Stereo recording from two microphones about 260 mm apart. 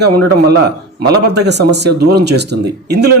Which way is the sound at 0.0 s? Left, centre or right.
Right.